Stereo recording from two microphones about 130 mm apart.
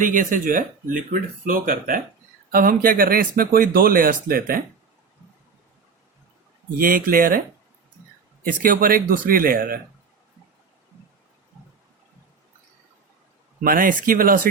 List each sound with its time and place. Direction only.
0.0 s speech: 90° right
6.7 s speech: 90° right
8.4 s speech: 90° right
13.7 s speech: 90° right